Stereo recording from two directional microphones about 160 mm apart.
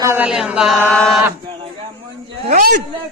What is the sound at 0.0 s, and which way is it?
Speech, 15° right (ahead or behind).